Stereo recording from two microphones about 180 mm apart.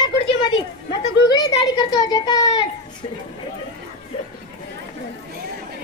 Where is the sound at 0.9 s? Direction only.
25° left (ahead or behind).